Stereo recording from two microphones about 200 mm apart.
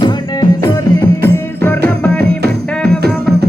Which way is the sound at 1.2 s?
10° left (ahead or behind).